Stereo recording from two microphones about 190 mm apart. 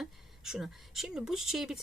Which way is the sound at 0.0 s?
Centre (ahead or behind).